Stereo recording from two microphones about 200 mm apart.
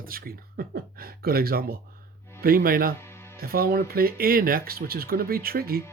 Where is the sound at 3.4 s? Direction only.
50° right (ahead or behind).